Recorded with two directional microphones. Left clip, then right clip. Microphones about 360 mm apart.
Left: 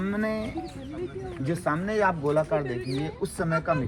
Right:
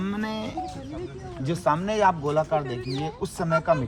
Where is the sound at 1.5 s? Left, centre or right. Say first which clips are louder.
Right 4 dB; centre.